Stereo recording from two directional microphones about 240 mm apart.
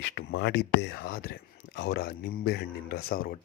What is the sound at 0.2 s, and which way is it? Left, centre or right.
Speech, left.